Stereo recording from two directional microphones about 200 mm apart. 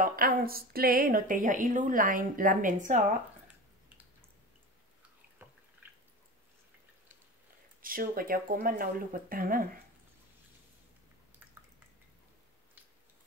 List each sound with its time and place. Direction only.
0.0 s a woman's voice: 45° right (ahead or behind)
5.4 s drip: 10° right (ahead or behind)
7.8 s a woman's voice: 45° right (ahead or behind)